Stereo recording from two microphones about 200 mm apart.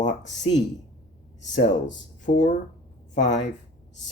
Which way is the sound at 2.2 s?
40° left (ahead or behind).